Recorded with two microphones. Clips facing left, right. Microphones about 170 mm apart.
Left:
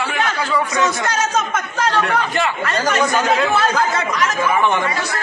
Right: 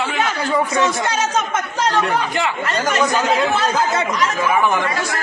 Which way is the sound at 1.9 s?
10° right (ahead or behind).